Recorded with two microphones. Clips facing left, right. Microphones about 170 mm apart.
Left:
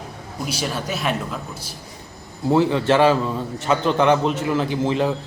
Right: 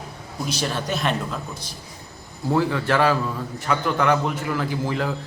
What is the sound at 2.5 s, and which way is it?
A man's voice, 20° left (ahead or behind).